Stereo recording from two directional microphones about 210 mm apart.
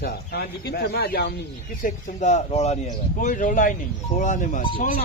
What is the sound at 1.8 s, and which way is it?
Speech, 35° left (ahead or behind).